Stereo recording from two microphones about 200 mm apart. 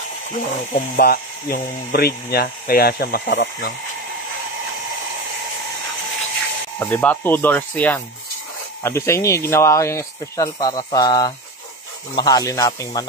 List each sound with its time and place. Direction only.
0.9 s speech: 50° left (ahead or behind)
6.8 s speech: 10° left (ahead or behind)